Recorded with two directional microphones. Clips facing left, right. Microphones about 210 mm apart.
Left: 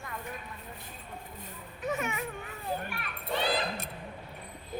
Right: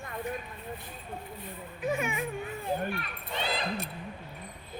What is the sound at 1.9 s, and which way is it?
Speech, 10° right (ahead or behind).